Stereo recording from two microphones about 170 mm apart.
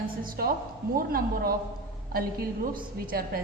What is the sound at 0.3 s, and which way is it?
A woman's voice, 60° right (ahead or behind).